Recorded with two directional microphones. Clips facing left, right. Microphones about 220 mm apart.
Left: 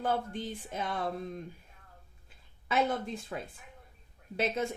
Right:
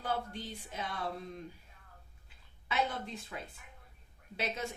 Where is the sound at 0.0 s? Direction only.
50° left (ahead or behind).